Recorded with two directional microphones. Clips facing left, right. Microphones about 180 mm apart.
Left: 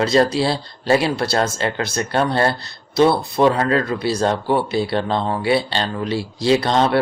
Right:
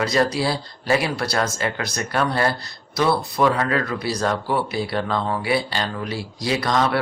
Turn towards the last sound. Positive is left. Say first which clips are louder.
# left 5 dB
turn(degrees=30)  # may be behind; listen again after turning